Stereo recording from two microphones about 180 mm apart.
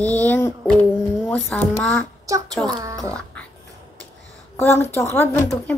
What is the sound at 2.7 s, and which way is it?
Speech, 20° right (ahead or behind).